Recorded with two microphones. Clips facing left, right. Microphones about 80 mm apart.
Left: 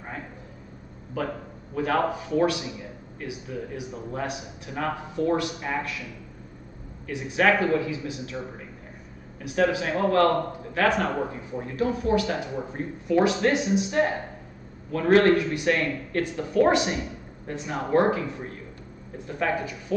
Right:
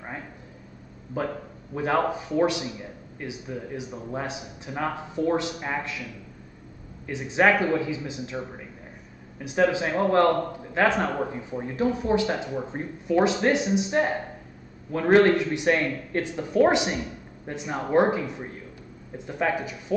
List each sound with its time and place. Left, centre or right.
1.2 s speech: right
7.1 s speech: right
9.4 s speech: right